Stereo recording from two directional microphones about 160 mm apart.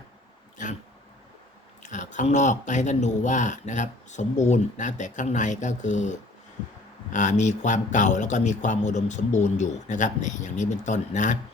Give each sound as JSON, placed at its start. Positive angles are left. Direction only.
{"t": 1.8, "sound": "speech", "side_deg": 50}